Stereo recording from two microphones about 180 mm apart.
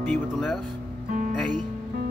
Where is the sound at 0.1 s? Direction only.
Centre (ahead or behind).